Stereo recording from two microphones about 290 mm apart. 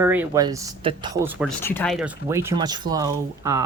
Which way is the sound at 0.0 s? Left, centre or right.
Centre.